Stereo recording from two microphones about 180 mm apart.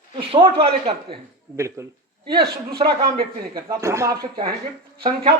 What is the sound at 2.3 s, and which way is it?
Speech, 60° right (ahead or behind).